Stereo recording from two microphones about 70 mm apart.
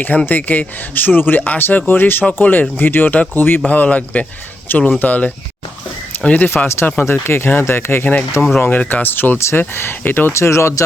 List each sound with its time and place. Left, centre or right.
0.3 s speech: left
6.7 s speech: left
10.3 s speech: left